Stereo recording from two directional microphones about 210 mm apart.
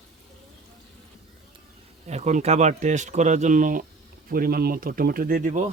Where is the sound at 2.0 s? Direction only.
30° right (ahead or behind).